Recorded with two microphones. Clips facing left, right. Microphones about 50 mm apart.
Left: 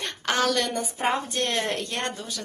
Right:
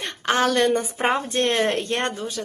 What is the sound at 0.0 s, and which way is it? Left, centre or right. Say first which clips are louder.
A woman's voice: right 4 dB; right.